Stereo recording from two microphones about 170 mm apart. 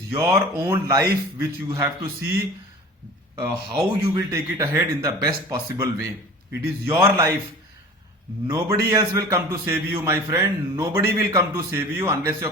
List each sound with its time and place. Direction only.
0.1 s a man's voice: 15° right (ahead or behind)
3.5 s a man's voice: 20° right (ahead or behind)
8.4 s a man's voice: 20° right (ahead or behind)